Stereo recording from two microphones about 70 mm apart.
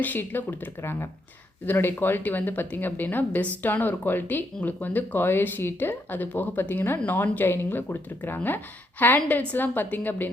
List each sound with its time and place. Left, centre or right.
0.0 s speech: left
0.8 s speech: left
1.6 s speech: left